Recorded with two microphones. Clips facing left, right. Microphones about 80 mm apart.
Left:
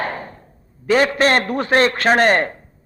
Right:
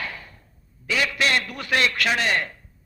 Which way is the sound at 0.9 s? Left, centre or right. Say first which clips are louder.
Left 9 dB; left.